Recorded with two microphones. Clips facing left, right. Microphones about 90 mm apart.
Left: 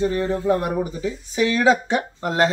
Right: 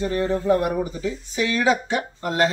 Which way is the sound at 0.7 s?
15° left (ahead or behind).